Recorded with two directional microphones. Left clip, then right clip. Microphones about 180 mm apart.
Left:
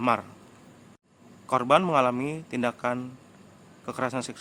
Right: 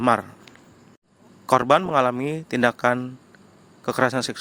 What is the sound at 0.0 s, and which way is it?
Speech, 30° right (ahead or behind).